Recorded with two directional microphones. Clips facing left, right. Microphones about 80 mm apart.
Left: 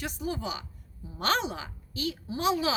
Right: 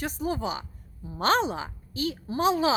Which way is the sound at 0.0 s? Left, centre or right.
Right.